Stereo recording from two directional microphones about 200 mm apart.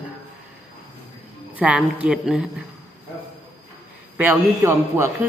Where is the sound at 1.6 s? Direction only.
5° right (ahead or behind).